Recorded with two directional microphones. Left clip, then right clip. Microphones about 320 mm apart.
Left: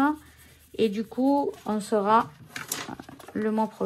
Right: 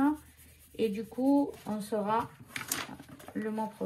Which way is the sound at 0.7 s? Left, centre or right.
Centre.